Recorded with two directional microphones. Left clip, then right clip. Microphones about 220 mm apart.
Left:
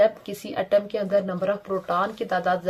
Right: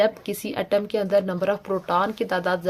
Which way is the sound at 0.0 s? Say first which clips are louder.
Left 1 dB; 35° right (ahead or behind).